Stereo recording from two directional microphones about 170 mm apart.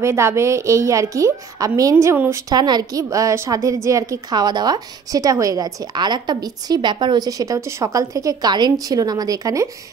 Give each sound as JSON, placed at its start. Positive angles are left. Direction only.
{"t": 0.0, "sound": "a woman's voice", "side_deg": -15}